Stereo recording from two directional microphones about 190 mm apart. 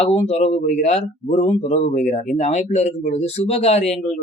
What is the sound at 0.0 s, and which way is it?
Speech, 35° left (ahead or behind).